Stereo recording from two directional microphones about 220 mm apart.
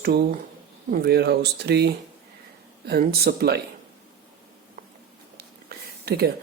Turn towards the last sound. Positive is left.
turn(degrees=-45)  # may be behind; listen again after turning